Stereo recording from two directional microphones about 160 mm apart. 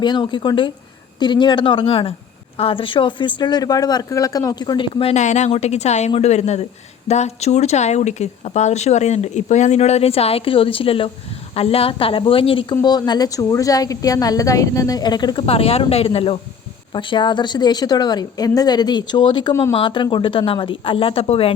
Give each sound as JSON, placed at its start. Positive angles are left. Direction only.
{"t": 0.0, "sound": "a woman's voice", "side_deg": 30}
{"t": 5.1, "sound": "a woman's voice", "side_deg": 45}